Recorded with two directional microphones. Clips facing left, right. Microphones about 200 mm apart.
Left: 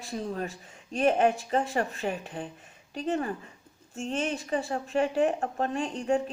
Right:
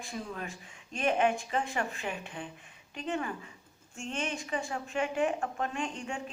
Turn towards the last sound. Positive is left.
turn(degrees=35)  # may be behind; listen again after turning